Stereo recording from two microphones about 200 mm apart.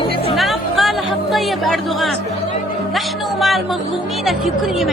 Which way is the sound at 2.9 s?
Centre (ahead or behind).